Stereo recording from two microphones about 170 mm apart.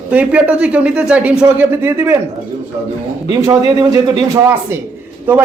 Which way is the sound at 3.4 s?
20° right (ahead or behind).